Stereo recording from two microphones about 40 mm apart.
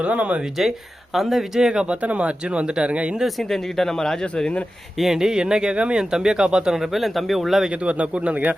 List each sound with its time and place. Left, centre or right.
0.0 s speech: right
1.1 s speech: centre
1.6 s speech: right
1.9 s speech: right
3.2 s speech: centre
4.9 s speech: centre; by 6.0 s right
6.0 s speech: centre
6.9 s speech: centre
7.7 s speech: right